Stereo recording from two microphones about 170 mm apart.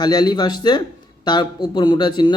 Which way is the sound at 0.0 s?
25° left (ahead or behind).